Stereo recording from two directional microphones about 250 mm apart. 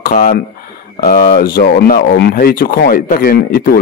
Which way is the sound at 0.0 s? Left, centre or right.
Left.